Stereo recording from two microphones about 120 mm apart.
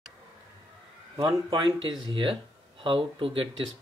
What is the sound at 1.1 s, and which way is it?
Speech, 45° right (ahead or behind).